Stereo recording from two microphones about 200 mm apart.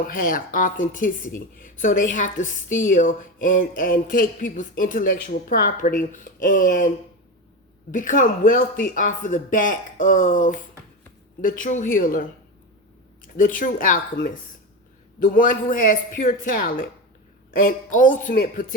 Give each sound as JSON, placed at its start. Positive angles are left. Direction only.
{"t": 0.1, "sound": "speech", "side_deg": 45}
{"t": 13.3, "sound": "speech", "side_deg": 40}